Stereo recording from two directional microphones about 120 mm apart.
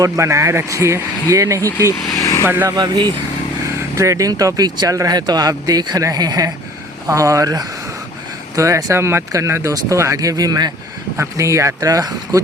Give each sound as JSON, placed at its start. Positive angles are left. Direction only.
{"t": 0.0, "sound": "speech", "side_deg": -25}
{"t": 2.1, "sound": "vehicle", "side_deg": 25}
{"t": 2.4, "sound": "speech", "side_deg": -20}
{"t": 2.7, "sound": "speech", "side_deg": -35}
{"t": 3.8, "sound": "speech", "side_deg": -25}